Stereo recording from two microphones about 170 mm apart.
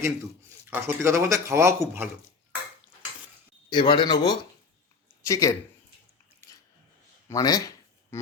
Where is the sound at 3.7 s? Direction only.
30° left (ahead or behind).